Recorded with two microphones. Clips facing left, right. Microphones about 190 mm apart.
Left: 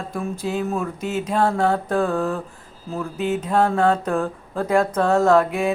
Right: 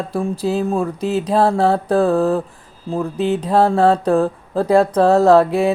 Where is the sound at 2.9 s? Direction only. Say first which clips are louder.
Right 5 dB; 35° right (ahead or behind).